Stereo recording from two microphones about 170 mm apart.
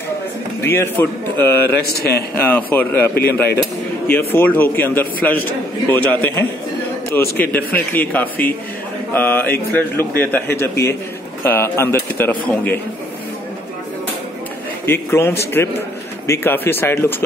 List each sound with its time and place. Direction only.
0.6 s a man's voice: 15° left (ahead or behind)
1.8 s a man's voice: 65° left (ahead or behind)
2.0 s a man's voice: 10° left (ahead or behind)
4.1 s a man's voice: 15° left (ahead or behind)
14.9 s a man's voice: 15° left (ahead or behind)